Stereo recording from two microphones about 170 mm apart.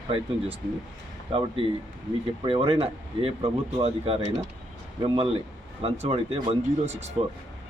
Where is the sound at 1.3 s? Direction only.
30° right (ahead or behind).